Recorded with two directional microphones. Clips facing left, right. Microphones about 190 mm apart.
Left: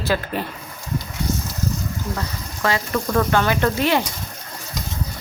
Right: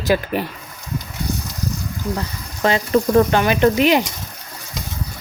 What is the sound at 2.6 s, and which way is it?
Speech, 25° right (ahead or behind).